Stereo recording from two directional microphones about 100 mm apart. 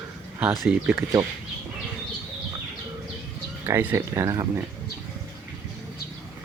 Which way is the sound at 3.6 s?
25° right (ahead or behind).